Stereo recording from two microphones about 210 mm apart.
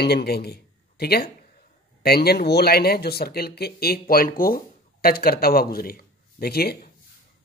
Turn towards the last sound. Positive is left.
turn(degrees=50)  # may be behind; listen again after turning